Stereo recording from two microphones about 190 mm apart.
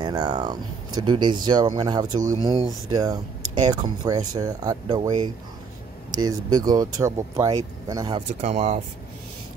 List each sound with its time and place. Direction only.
0.0 s speech: 20° right (ahead or behind)
8.3 s speech: 35° right (ahead or behind)